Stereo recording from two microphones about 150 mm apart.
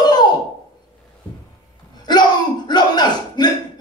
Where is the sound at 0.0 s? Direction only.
30° left (ahead or behind).